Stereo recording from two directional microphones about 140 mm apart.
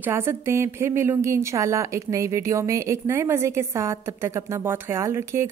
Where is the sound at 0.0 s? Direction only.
20° right (ahead or behind).